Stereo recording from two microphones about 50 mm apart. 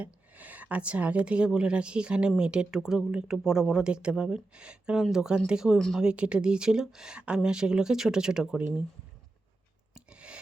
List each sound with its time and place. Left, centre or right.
0.0 s speech: right; by 8.6 s centre
9.9 s rub: right